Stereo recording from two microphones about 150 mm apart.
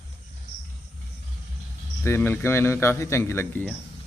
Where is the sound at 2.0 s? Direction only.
15° left (ahead or behind).